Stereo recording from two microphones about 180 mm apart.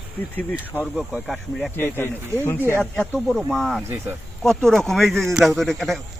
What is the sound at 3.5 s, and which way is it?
A man's voice, centre (ahead or behind).